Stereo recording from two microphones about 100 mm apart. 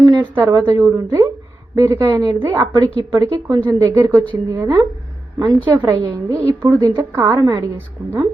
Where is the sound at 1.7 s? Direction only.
35° right (ahead or behind).